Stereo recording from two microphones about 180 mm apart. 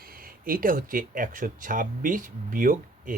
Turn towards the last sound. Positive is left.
turn(degrees=-50)  # may be behind; listen again after turning